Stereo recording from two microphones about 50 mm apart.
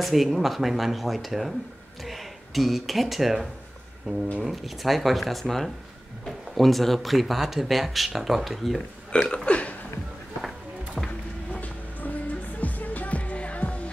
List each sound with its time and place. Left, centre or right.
0.0 s speech: centre
9.3 s burping: left
11.0 s music: centre
11.6 s music: left